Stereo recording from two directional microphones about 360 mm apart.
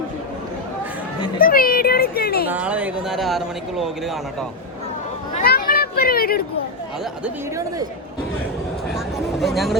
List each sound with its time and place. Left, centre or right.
1.4 s a sound: left
2.5 s speech: centre
5.3 s children playing: left
9.4 s speech: centre